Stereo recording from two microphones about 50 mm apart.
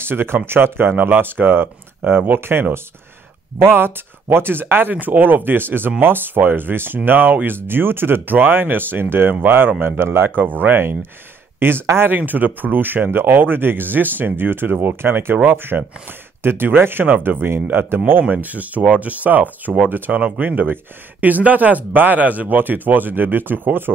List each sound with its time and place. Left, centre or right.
0.0 s speech: right
3.6 s speech: right
10.4 s speech: right
11.8 s speech: right
12.1 s speech: right
17.8 s speech: right
18.3 s speech: right